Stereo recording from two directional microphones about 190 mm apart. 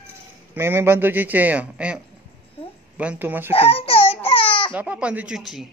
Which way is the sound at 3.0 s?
10° right (ahead or behind).